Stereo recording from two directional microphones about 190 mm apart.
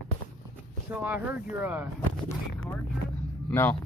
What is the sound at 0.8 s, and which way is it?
Speech, 10° right (ahead or behind).